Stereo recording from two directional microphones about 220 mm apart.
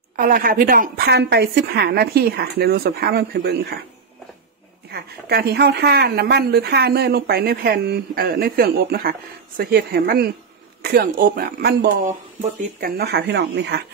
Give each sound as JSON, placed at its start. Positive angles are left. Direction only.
{"t": 0.1, "sound": "a woman's voice", "side_deg": -40}
{"t": 4.9, "sound": "a woman's voice", "side_deg": -45}